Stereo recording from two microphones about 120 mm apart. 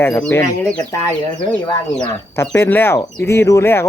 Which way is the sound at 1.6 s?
35° left (ahead or behind).